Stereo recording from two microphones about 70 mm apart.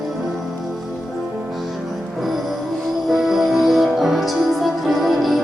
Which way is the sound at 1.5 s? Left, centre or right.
Centre.